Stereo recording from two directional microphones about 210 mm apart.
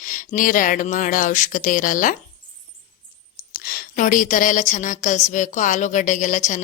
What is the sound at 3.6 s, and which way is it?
A woman's voice, 40° left (ahead or behind).